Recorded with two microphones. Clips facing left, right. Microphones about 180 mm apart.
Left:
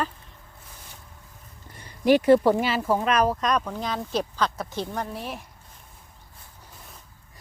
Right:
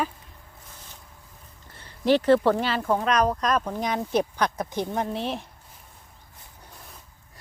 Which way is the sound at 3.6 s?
15° right (ahead or behind).